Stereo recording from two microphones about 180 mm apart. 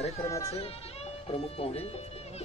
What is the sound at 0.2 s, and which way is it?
Speech, 15° left (ahead or behind).